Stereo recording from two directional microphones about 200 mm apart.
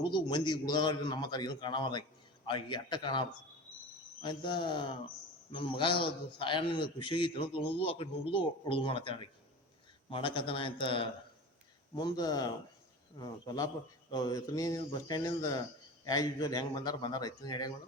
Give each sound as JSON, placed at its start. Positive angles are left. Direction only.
{"t": 0.0, "sound": "speech", "side_deg": 25}